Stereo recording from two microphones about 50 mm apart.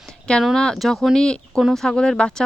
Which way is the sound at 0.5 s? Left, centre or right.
Centre.